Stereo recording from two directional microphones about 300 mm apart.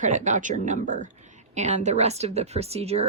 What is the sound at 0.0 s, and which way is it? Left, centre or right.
Speech, right.